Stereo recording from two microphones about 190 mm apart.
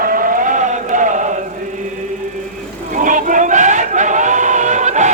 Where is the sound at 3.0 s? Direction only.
45° right (ahead or behind).